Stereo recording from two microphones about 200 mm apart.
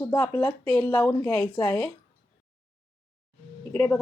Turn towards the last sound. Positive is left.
turn(degrees=10)  # may be behind; listen again after turning